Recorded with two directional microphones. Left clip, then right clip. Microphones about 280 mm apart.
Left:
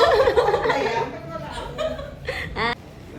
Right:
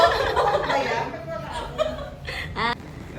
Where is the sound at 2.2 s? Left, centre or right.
Centre.